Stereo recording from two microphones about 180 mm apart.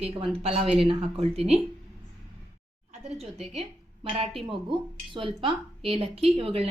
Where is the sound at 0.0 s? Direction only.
30° right (ahead or behind).